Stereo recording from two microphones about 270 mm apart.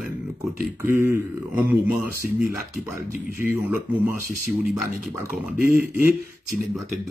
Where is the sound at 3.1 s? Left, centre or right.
Left.